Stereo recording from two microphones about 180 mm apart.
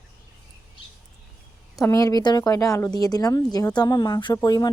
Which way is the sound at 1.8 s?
15° left (ahead or behind).